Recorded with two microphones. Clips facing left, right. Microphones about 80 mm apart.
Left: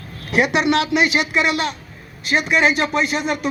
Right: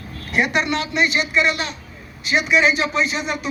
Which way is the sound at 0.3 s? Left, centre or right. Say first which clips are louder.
Left 3 dB; left.